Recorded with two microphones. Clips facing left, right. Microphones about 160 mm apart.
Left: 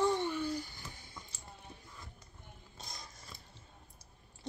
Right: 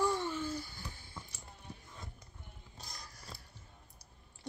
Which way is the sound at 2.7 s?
20° left (ahead or behind).